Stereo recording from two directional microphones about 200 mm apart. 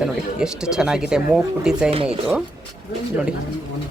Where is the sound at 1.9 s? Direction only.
30° right (ahead or behind).